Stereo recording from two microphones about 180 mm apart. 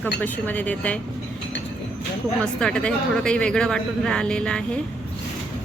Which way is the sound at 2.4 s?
5° left (ahead or behind).